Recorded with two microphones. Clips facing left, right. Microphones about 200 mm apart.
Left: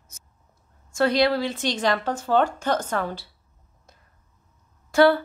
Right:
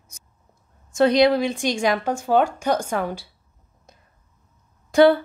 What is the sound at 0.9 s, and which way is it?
A woman's voice, 20° right (ahead or behind).